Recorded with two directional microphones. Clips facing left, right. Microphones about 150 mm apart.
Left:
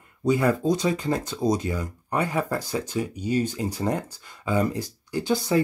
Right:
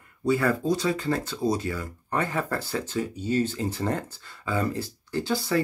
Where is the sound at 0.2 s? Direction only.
20° left (ahead or behind).